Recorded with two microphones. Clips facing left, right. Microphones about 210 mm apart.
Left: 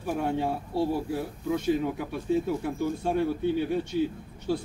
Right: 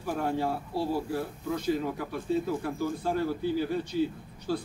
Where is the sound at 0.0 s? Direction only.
20° left (ahead or behind).